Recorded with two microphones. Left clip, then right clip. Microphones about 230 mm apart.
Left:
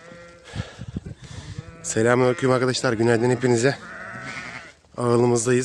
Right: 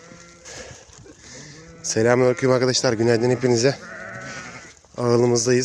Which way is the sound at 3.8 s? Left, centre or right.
Left.